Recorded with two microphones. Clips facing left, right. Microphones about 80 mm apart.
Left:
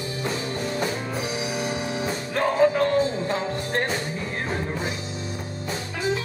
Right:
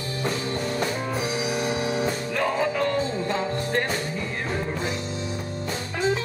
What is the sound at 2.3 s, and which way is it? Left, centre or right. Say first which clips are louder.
Music: left 7 dB; left.